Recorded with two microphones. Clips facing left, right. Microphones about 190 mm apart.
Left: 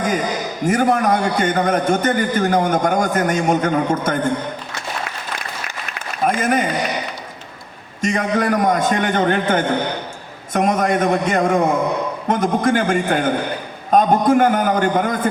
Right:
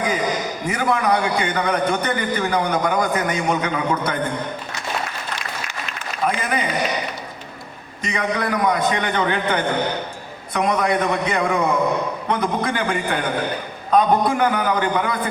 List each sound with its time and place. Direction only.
0.6 s a man's voice: 45° left (ahead or behind)
6.2 s a man's voice: 45° left (ahead or behind)
8.0 s a man's voice: 45° left (ahead or behind)